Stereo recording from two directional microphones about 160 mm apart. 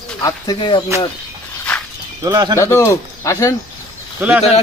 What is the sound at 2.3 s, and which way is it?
Speech, 25° right (ahead or behind).